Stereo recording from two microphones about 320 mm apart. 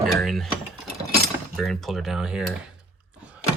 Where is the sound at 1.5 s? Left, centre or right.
Centre.